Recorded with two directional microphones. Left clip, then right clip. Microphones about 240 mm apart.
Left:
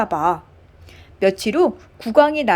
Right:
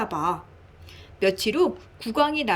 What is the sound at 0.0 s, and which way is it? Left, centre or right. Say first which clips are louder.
A woman's voice: left 7 dB; centre.